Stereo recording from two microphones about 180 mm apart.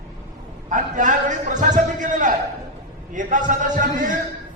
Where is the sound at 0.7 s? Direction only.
45° right (ahead or behind).